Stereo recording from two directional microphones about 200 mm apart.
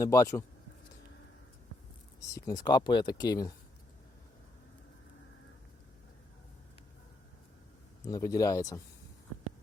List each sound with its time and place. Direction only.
0.0 s speech: 15° left (ahead or behind)
2.2 s speech: 15° left (ahead or behind)
8.0 s speech: 15° left (ahead or behind)